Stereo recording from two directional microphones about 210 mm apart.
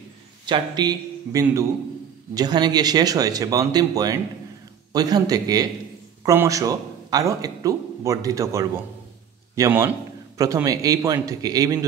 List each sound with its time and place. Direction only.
0.5 s a man's voice: 20° right (ahead or behind)